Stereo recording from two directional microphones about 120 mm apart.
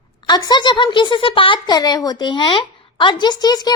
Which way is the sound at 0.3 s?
40° left (ahead or behind).